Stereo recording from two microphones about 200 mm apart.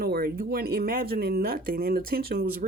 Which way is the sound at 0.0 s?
50° right (ahead or behind).